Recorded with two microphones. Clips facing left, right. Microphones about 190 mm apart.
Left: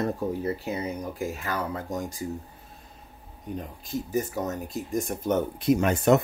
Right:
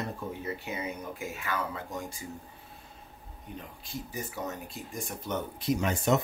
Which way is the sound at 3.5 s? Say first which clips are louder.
Left 9 dB; 40° left (ahead or behind).